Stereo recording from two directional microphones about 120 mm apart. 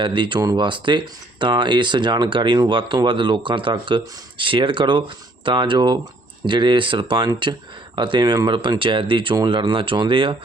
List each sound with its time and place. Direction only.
0.0 s speech: 40° right (ahead or behind)